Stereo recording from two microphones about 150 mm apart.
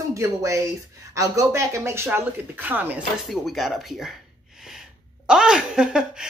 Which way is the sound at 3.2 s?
Centre (ahead or behind).